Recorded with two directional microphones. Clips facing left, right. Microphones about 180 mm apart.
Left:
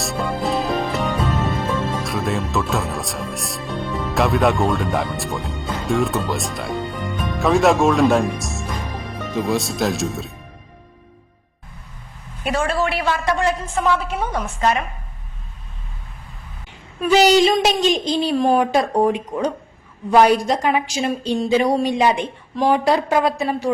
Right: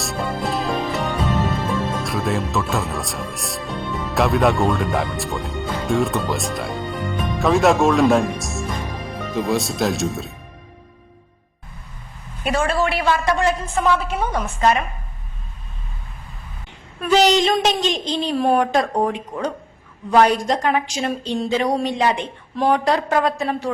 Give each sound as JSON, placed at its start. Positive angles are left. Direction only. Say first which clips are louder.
{"t": 0.0, "sound": "music", "louder": "left 2 dB", "side_deg": 0}
{"t": 2.0, "sound": "speech", "louder": "even", "side_deg": 0}
{"t": 12.5, "sound": "a woman's voice", "louder": "right 1 dB", "side_deg": -10}
{"t": 17.0, "sound": "a woman's voice", "louder": "left 2 dB", "side_deg": 5}